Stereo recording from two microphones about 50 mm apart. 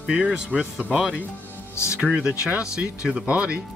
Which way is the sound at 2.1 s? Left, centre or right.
Centre.